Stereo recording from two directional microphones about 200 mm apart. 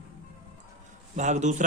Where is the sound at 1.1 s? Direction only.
35° right (ahead or behind).